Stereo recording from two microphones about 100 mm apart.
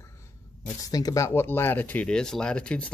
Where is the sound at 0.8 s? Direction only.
35° left (ahead or behind).